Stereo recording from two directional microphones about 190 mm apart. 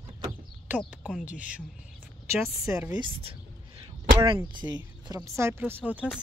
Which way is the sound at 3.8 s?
25° right (ahead or behind).